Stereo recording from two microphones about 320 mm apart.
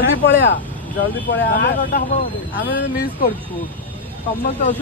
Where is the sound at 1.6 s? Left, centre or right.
Left.